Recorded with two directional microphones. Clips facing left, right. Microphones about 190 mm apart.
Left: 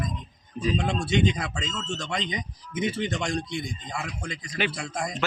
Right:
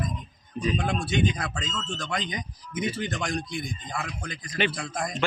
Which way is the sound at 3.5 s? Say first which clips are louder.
Left 1 dB; 25° left (ahead or behind).